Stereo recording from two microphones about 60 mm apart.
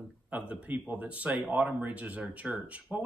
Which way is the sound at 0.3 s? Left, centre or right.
Right.